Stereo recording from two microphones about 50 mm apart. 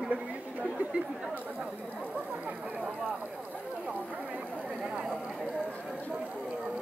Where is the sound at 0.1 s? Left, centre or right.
Right.